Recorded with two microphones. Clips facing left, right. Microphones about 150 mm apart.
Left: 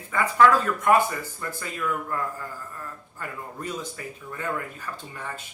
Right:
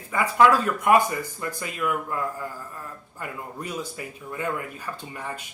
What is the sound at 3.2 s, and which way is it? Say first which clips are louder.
Speech: even; 10° right (ahead or behind).